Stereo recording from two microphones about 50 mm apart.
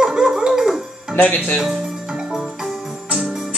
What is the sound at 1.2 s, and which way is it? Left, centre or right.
Speech, left.